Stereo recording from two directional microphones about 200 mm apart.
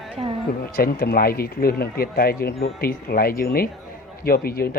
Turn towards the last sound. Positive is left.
turn(degrees=50)  # may be behind; listen again after turning